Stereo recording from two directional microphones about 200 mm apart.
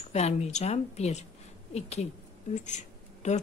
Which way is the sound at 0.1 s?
35° left (ahead or behind).